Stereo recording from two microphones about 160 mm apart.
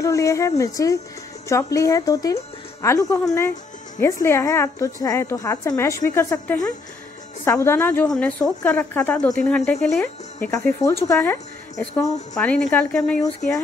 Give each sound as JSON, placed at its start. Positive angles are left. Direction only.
{"t": 0.0, "sound": "a woman's voice", "side_deg": 20}
{"t": 10.5, "sound": "a woman's voice", "side_deg": 20}